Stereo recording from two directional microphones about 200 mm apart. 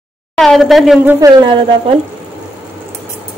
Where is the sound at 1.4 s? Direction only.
25° right (ahead or behind).